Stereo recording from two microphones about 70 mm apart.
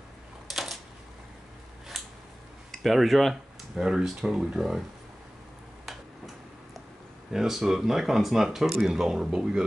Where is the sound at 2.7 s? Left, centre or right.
Centre.